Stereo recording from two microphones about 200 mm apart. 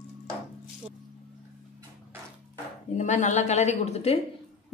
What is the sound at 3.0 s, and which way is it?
Speech, 35° left (ahead or behind).